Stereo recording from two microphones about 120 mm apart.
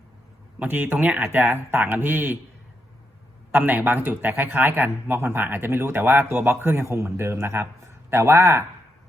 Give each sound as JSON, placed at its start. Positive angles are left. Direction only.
{"t": 0.6, "sound": "speech", "side_deg": -15}
{"t": 3.5, "sound": "speech", "side_deg": -15}